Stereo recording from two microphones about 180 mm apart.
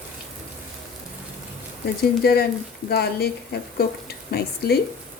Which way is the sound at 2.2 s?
60° left (ahead or behind).